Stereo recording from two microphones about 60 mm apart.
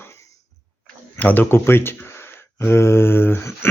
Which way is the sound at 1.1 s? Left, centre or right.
Left.